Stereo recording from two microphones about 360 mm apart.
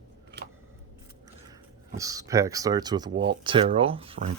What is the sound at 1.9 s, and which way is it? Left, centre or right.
Speech, centre.